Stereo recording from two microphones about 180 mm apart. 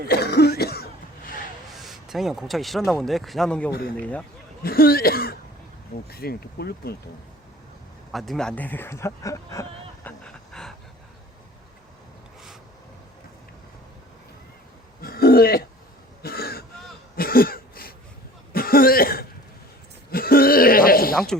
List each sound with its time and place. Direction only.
0.1 s cough: 65° left (ahead or behind)
1.8 s speech: centre (ahead or behind)
3.7 s speech: 60° left (ahead or behind)
4.0 s a man's voice: 5° left (ahead or behind)
4.6 s speech: 55° left (ahead or behind)
8.1 s a sound: centre (ahead or behind)
15.0 s throat clearing: 60° left (ahead or behind)
17.2 s a sound: 55° left (ahead or behind)
18.5 s cough: 55° left (ahead or behind)
20.1 s throat clearing: 55° left (ahead or behind)